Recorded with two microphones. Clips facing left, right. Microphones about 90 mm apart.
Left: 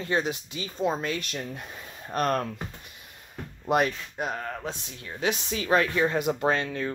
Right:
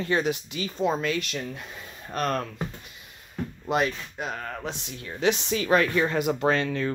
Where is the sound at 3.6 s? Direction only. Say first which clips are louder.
Left 2 dB; 50° left (ahead or behind).